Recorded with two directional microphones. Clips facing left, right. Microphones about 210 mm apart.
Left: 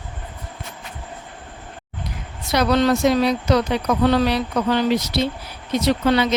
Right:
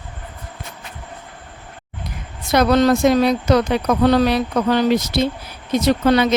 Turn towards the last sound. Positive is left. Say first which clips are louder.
# right 3 dB
turn(degrees=-45)  # may be behind; listen again after turning